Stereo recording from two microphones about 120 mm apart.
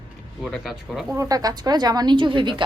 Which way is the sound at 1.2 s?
30° right (ahead or behind).